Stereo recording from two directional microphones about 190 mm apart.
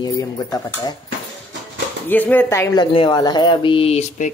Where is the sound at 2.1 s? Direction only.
10° left (ahead or behind).